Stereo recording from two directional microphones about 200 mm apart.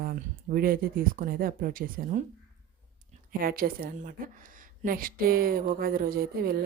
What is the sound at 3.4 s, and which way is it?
Speech, 50° right (ahead or behind).